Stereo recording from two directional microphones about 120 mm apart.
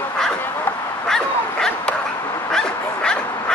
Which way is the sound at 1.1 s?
5° left (ahead or behind).